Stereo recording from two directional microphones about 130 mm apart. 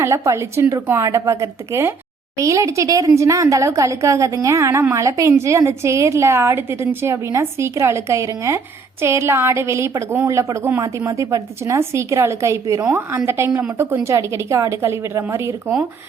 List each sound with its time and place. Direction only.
0.0 s a woman's voice: 20° right (ahead or behind)